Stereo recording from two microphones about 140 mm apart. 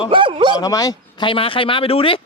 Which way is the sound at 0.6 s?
25° left (ahead or behind).